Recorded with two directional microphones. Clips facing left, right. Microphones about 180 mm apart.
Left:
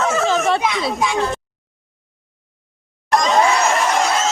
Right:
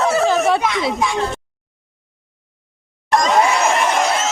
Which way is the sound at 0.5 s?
20° right (ahead or behind).